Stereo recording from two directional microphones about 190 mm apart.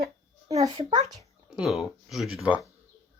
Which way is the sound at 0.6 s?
20° right (ahead or behind).